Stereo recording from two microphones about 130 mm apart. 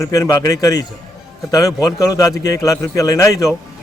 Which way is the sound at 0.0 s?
25° left (ahead or behind).